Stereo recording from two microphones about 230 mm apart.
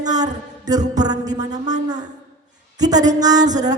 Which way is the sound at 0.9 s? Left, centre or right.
Centre.